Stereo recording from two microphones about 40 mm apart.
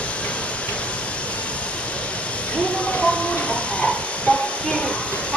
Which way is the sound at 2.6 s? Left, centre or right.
Left.